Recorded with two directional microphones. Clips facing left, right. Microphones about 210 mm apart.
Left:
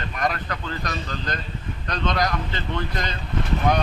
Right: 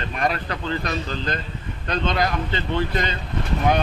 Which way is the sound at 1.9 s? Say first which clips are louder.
Right 2 dB; 25° right (ahead or behind).